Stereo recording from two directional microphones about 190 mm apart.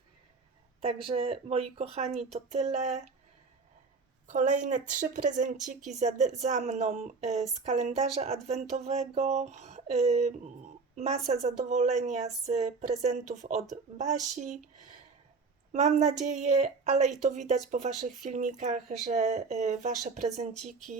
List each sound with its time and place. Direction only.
1.0 s speech: 30° right (ahead or behind)
4.3 s a woman's voice: 40° right (ahead or behind)